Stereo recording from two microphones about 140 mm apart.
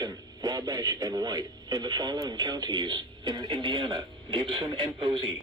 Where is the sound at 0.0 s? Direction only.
25° right (ahead or behind).